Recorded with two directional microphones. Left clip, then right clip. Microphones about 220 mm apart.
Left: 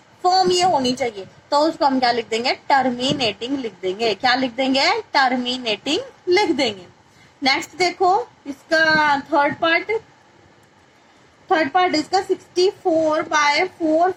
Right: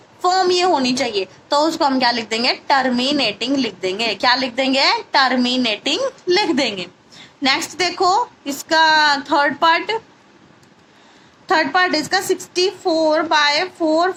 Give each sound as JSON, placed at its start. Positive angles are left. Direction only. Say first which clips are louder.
{"t": 0.2, "sound": "a woman's voice", "louder": "even", "side_deg": -25}
{"t": 11.4, "sound": "a woman's voice", "louder": "right 2 dB", "side_deg": -40}